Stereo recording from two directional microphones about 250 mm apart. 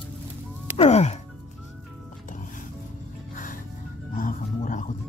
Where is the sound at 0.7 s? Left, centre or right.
Left.